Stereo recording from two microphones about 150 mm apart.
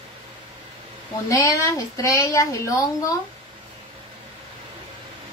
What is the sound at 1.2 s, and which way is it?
A woman's voice, 20° left (ahead or behind).